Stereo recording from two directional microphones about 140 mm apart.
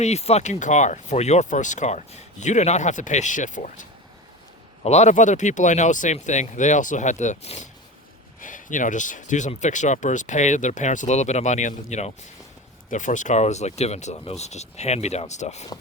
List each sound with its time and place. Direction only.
0.0 s speech: 50° left (ahead or behind)
4.8 s speech: 50° left (ahead or behind)
8.4 s speech: 70° left (ahead or behind); by 15.6 s 55° left (ahead or behind)